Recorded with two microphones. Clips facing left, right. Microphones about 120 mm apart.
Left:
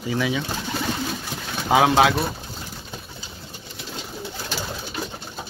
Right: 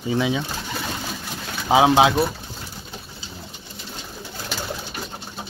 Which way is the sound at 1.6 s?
15° right (ahead or behind).